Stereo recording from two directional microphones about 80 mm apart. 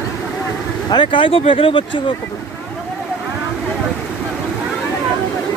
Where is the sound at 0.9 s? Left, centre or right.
Left.